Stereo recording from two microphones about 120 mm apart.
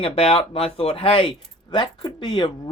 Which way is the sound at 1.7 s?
40° left (ahead or behind).